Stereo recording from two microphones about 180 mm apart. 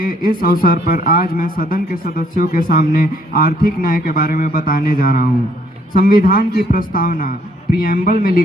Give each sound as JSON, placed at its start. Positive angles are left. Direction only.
{"t": 0.0, "sound": "speech", "side_deg": 55}